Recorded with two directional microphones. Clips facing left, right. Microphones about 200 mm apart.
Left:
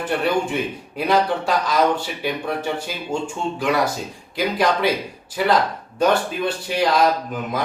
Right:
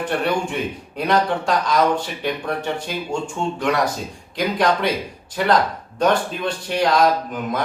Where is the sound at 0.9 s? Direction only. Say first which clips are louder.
Even; 5° left (ahead or behind).